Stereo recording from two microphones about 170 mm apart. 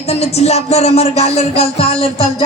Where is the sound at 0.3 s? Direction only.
40° left (ahead or behind).